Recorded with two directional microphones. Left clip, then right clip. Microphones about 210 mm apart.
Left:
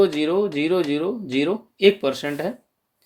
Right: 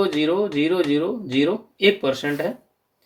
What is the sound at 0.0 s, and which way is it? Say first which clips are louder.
Speech: left 1 dB; 45° left (ahead or behind).